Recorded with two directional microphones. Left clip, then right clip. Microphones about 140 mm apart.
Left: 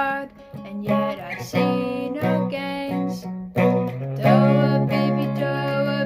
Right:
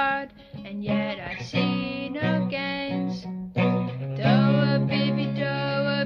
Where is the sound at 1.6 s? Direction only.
15° left (ahead or behind).